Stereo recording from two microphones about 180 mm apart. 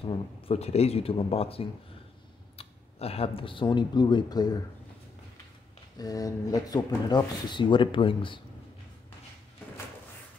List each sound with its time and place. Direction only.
0.0 s speech: 30° left (ahead or behind)
5.9 s speech: 20° left (ahead or behind)